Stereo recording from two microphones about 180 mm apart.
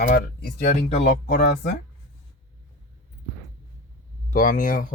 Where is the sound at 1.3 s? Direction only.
60° left (ahead or behind).